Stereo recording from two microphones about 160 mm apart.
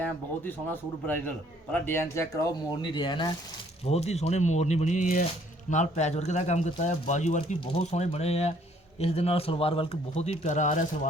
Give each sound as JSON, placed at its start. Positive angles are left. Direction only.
{"t": 0.0, "sound": "speech", "side_deg": 10}
{"t": 2.8, "sound": "speech", "side_deg": 30}
{"t": 3.8, "sound": "speech", "side_deg": 40}